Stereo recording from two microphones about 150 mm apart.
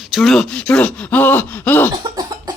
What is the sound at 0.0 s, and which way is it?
Speech, centre (ahead or behind).